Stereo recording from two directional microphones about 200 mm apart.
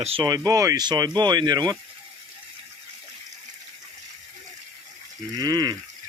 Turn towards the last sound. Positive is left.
turn(degrees=-20)  # may be behind; listen again after turning